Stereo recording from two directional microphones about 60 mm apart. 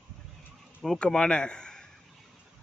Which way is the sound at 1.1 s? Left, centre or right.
Centre.